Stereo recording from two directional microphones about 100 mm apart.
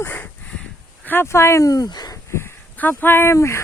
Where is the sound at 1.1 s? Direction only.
25° left (ahead or behind); by 2.2 s 40° left (ahead or behind).